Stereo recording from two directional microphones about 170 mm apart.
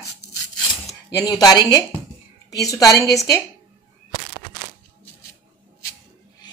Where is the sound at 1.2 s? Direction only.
20° left (ahead or behind).